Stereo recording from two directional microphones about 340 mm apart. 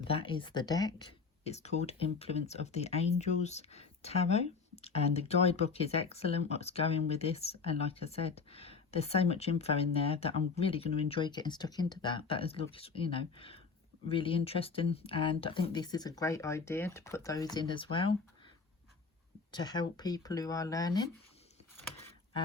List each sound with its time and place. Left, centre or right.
0.1 s speech: centre
19.5 s speech: centre